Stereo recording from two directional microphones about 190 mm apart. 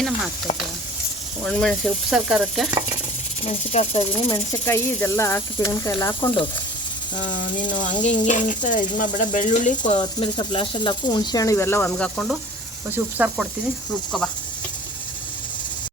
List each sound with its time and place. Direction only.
1.5 s speech: 5° left (ahead or behind)
3.4 s speech: 35° left (ahead or behind)
4.6 s speech: 15° left (ahead or behind)
7.2 s a sound: 25° left (ahead or behind)
8.0 s speech: 40° left (ahead or behind)
10.0 s speech: 25° left (ahead or behind); by 12.4 s 5° left (ahead or behind)
12.9 s speech: 10° right (ahead or behind)